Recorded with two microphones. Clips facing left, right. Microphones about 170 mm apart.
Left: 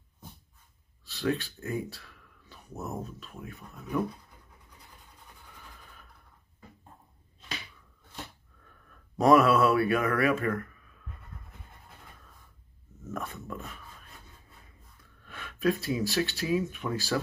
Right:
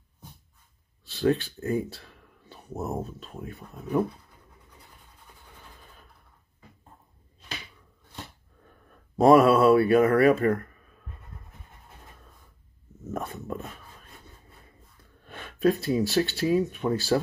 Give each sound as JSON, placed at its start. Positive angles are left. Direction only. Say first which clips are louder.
{"t": 1.0, "sound": "speech", "louder": "right 6 dB", "side_deg": -30}
{"t": 8.8, "sound": "speech", "louder": "right 5 dB", "side_deg": -30}
{"t": 13.0, "sound": "dog", "louder": "right 4 dB", "side_deg": -30}
{"t": 15.2, "sound": "a sound", "louder": "right 4 dB", "side_deg": -35}
{"t": 16.1, "sound": "speech", "louder": "right 3 dB", "side_deg": -30}